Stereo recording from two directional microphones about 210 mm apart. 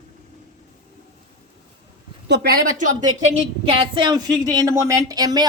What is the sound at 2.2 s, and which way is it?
Speech, 50° right (ahead or behind).